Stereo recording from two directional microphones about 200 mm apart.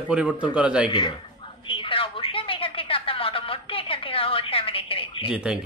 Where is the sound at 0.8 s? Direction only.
25° left (ahead or behind).